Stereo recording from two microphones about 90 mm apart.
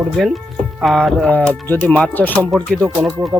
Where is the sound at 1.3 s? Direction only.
15° left (ahead or behind).